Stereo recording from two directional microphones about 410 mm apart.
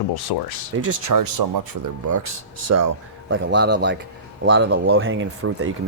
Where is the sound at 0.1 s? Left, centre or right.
Left.